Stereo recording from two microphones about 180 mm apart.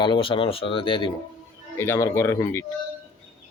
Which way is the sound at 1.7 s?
15° left (ahead or behind).